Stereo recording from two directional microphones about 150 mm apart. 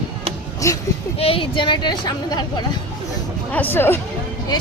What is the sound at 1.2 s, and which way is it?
Speech, 40° left (ahead or behind).